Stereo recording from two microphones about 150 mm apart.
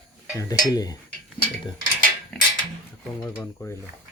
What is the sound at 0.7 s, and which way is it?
Speech, 25° left (ahead or behind).